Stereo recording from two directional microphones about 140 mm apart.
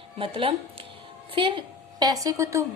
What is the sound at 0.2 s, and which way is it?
A woman's voice, 40° right (ahead or behind).